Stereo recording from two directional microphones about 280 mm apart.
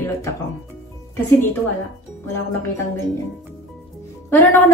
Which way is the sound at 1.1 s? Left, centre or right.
Centre.